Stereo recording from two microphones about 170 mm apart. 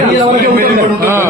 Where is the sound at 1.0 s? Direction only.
15° right (ahead or behind).